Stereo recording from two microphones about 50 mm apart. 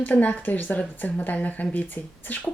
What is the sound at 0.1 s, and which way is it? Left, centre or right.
Speech, left.